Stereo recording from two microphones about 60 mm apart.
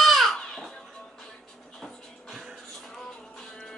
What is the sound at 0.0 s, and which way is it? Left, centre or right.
Children playing, centre.